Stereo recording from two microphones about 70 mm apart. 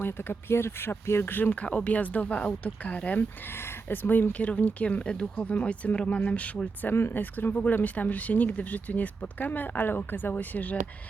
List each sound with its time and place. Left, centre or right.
0.0 s speech: left
6.9 s speech: left